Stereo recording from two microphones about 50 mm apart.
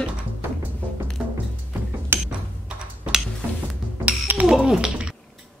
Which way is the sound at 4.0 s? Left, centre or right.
Right.